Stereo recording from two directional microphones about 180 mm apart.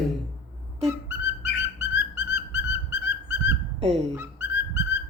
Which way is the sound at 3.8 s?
35° right (ahead or behind).